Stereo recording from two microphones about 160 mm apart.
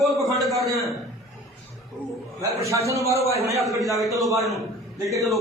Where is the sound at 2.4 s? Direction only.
20° right (ahead or behind).